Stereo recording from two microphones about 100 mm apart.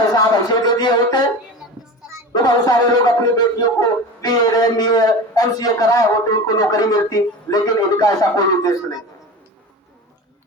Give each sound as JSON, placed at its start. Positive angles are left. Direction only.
{"t": 0.1, "sound": "music", "side_deg": 40}
{"t": 2.3, "sound": "speech", "side_deg": 40}